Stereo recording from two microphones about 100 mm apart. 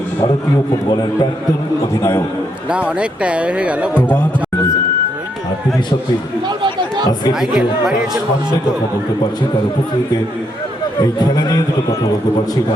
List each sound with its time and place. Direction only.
0.9 s a man's voice: 40° left (ahead or behind)
1.9 s a man's voice: 30° left (ahead or behind)
2.6 s speech: 10° right (ahead or behind)
6.6 s a sound: 45° right (ahead or behind)
7.3 s speech: 5° right (ahead or behind)
11.0 s a man's voice: 40° left (ahead or behind)